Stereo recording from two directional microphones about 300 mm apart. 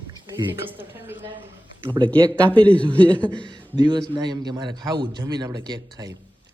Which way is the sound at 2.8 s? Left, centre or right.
Centre.